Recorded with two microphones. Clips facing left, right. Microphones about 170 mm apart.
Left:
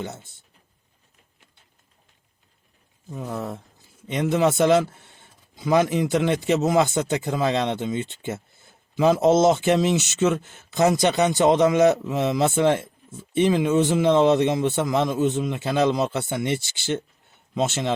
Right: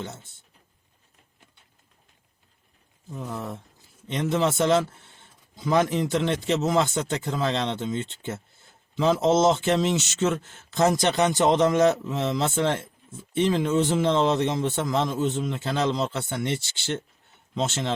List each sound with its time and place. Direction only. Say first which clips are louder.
4.1 s speech: left 3 dB; 10° left (ahead or behind)